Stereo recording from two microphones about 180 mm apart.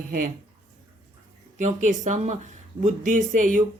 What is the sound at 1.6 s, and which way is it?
Speech, 45° right (ahead or behind).